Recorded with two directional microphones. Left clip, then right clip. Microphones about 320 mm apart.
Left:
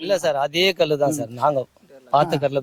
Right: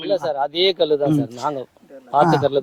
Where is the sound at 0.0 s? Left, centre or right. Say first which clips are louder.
Even; left.